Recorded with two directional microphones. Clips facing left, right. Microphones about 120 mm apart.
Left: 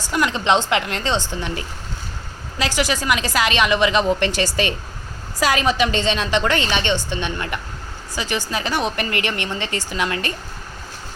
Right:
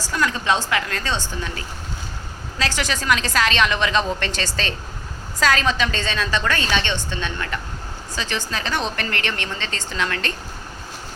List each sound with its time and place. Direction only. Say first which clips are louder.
0.1 s a woman's voice: left 3 dB; 20° left (ahead or behind)